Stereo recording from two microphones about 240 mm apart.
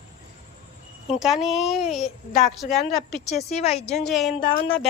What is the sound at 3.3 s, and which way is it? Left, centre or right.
Speech, left.